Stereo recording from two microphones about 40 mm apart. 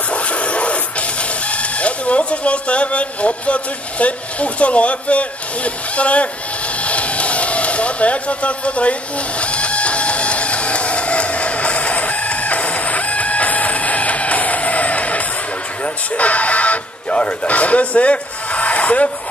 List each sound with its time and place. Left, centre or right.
0.1 s music: left
1.5 s speech: left
6.8 s a sound: left
9.4 s music: left
15.8 s speech: left